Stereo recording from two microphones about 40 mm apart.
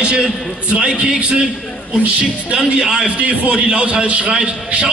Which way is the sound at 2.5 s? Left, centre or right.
Centre.